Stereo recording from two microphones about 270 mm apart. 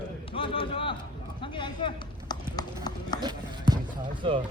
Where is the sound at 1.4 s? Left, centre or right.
Centre.